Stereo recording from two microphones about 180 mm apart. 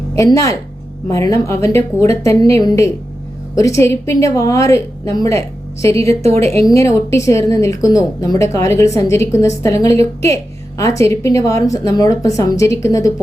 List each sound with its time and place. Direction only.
0.2 s a woman's voice: 20° left (ahead or behind)